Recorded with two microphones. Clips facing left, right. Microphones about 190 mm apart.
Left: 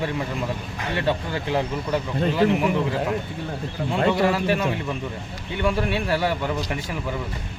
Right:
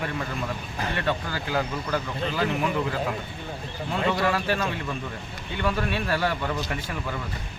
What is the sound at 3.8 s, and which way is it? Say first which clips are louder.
Speech: left 4 dB; 25° left (ahead or behind).